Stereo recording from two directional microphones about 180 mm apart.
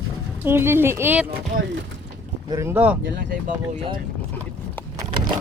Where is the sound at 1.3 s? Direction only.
60° right (ahead or behind).